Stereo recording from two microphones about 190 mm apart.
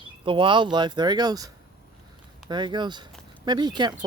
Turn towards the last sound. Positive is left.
turn(degrees=-20)  # may be behind; listen again after turning